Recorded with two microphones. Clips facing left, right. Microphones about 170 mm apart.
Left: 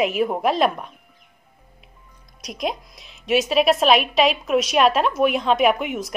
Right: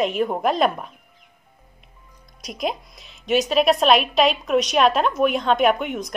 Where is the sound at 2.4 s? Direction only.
Centre (ahead or behind).